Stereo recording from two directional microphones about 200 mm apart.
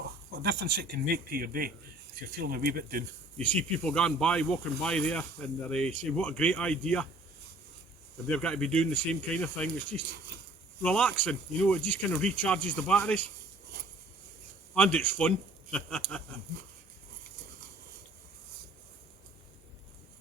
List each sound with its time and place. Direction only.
0.4 s speech: 50° right (ahead or behind)
3.3 s speech: 5° left (ahead or behind)
8.3 s speech: 5° left (ahead or behind)
14.8 s speech: 10° left (ahead or behind)